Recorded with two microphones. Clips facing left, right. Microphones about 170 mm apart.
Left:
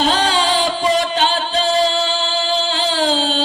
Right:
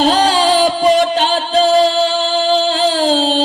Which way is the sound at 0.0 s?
40° right (ahead or behind).